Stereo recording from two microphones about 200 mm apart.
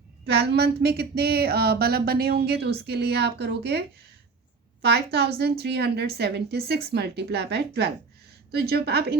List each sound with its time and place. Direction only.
0.3 s a woman's voice: 55° right (ahead or behind)